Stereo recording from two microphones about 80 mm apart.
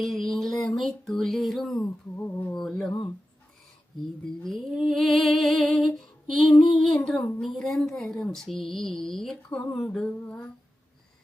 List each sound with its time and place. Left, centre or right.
0.0 s female singing: centre
2.1 s a sound: left
2.5 s mantra: centre
4.4 s female singing: centre
6.7 s mantra: centre
7.4 s female singing: centre
8.6 s mantra: centre
10.1 s mantra: centre